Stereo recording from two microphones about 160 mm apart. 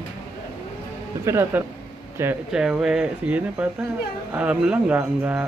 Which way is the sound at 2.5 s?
5° right (ahead or behind).